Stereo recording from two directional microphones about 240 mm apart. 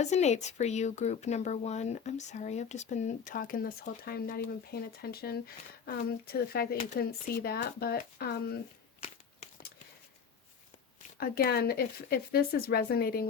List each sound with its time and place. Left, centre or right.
0.0 s speech: left
9.0 s a sound: left
11.2 s speech: left